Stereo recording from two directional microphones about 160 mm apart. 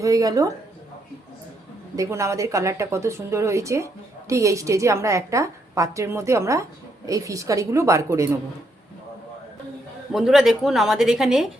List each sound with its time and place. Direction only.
0.0 s a woman's voice: 20° right (ahead or behind)
2.0 s a woman's voice: 20° right (ahead or behind)
10.1 s a woman's voice: centre (ahead or behind)